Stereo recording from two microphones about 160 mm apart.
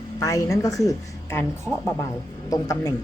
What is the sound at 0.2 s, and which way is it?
A woman's voice, 20° left (ahead or behind).